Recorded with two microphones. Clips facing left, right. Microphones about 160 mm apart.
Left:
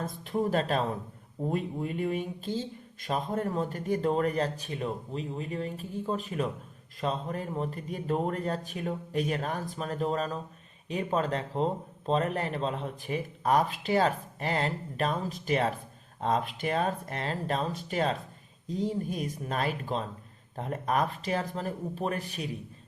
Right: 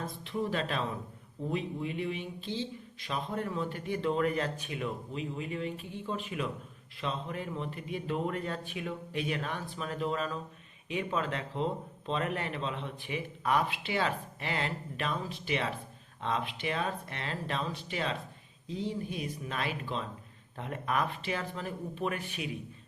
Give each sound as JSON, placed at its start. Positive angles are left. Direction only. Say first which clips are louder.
{"t": 0.0, "sound": "a man's voice", "louder": "left 4 dB", "side_deg": 45}